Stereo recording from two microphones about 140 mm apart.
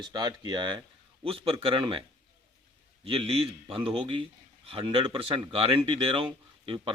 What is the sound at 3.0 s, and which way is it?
Speech, 40° right (ahead or behind).